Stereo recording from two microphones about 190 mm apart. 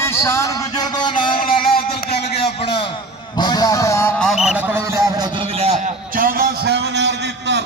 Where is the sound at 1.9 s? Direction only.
55° left (ahead or behind).